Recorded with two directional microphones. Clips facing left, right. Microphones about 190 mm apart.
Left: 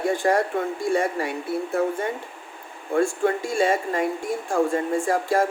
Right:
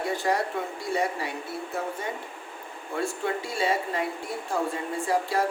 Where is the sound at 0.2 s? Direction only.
50° left (ahead or behind).